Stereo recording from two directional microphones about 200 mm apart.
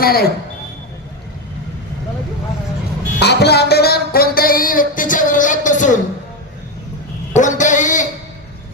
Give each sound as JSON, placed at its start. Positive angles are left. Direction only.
{"t": 0.0, "sound": "a woman's voice", "side_deg": 50}
{"t": 3.2, "sound": "music", "side_deg": 55}
{"t": 7.3, "sound": "a sound", "side_deg": 40}